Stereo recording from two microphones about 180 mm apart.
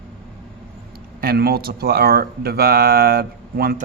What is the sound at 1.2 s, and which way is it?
Speech, 55° right (ahead or behind).